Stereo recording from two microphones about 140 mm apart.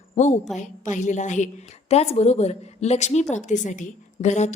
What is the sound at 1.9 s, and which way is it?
A woman's voice, 50° left (ahead or behind).